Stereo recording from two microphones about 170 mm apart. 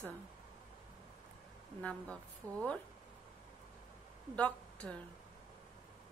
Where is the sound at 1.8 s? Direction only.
5° left (ahead or behind).